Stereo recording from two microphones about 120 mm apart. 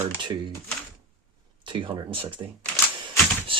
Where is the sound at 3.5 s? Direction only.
45° right (ahead or behind).